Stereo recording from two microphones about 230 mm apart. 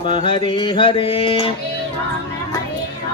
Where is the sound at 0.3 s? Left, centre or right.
Left.